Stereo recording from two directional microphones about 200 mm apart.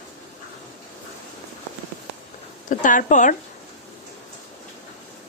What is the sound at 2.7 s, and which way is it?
Speech, 40° left (ahead or behind).